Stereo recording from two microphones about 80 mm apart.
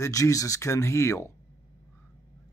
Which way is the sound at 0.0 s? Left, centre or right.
Left.